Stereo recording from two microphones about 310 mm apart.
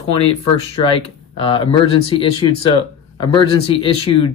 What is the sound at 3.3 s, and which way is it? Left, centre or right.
Speech, centre.